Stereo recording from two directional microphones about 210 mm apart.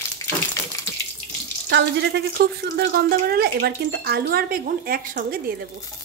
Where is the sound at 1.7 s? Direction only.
55° right (ahead or behind).